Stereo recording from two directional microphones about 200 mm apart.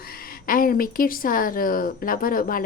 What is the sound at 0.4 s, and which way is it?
Speech, 45° left (ahead or behind).